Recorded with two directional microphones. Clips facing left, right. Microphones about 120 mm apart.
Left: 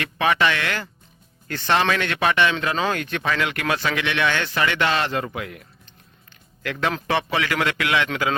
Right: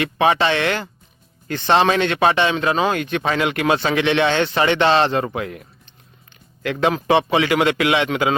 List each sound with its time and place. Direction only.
0.0 s a man's voice: 25° right (ahead or behind)
6.6 s a man's voice: 20° right (ahead or behind)